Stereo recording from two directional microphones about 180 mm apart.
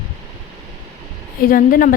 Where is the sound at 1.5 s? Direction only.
50° left (ahead or behind).